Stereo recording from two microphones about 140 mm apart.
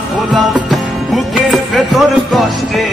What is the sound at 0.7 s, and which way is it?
Music, centre (ahead or behind).